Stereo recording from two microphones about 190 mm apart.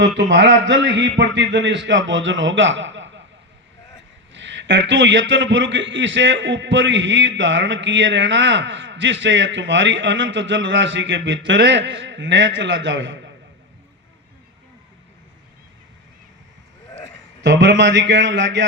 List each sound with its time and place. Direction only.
0.3 s a man's voice: 70° right (ahead or behind)
4.4 s a man's voice: 70° right (ahead or behind)
17.4 s a man's voice: 65° right (ahead or behind)